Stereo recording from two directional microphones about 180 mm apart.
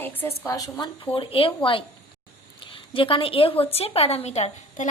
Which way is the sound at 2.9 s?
30° left (ahead or behind).